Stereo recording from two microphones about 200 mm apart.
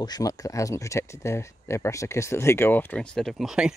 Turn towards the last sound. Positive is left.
turn(degrees=-5)  # may be behind; listen again after turning